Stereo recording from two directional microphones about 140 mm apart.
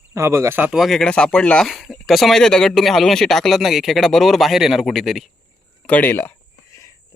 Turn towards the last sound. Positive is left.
turn(degrees=15)  # may be behind; listen again after turning